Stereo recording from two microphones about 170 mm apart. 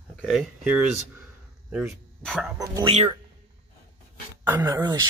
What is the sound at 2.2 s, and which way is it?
Speech, 5° left (ahead or behind).